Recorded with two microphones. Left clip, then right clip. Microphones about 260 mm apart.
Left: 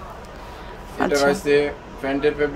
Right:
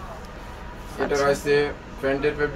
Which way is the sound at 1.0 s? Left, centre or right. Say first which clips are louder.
Left 4 dB; left.